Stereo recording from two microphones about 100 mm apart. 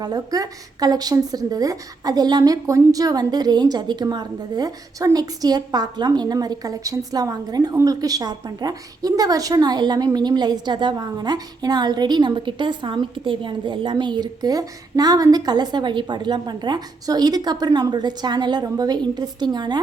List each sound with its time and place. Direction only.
0.0 s a woman's voice: 40° right (ahead or behind)